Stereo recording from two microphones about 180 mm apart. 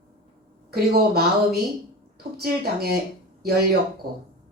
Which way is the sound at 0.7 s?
60° right (ahead or behind).